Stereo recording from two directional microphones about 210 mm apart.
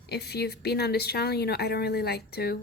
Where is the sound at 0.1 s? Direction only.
50° left (ahead or behind).